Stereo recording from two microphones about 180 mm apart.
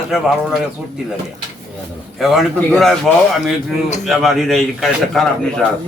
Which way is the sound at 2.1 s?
Centre (ahead or behind).